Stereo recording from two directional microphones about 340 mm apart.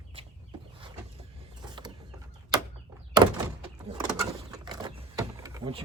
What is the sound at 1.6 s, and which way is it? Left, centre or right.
Mechanisms, centre.